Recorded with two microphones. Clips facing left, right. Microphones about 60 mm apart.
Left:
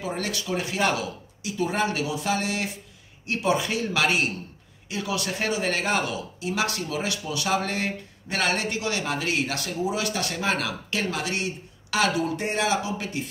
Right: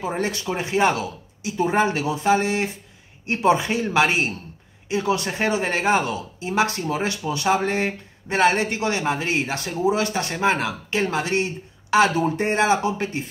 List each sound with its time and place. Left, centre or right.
0.0 s speech: right